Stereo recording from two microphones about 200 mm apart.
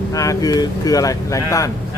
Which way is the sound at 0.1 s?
15° left (ahead or behind).